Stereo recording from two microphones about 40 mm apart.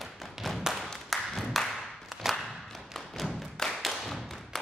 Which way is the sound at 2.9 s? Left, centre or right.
Centre.